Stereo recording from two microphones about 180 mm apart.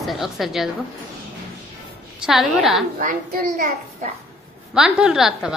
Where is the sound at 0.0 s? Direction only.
Centre (ahead or behind).